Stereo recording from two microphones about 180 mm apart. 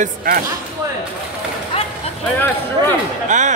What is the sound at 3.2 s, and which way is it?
Speech, 45° right (ahead or behind).